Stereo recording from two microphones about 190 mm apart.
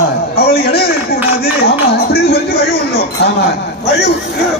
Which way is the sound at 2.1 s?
55° left (ahead or behind).